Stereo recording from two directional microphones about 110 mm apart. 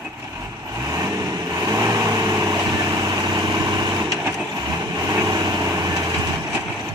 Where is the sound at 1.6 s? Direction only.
30° right (ahead or behind).